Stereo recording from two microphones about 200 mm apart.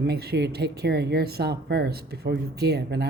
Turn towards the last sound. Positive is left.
turn(degrees=-55)  # may be behind; listen again after turning